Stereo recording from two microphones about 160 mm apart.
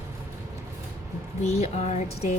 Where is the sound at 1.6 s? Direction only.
45° left (ahead or behind).